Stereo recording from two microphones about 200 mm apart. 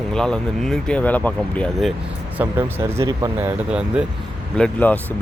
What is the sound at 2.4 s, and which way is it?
Speech, 10° right (ahead or behind).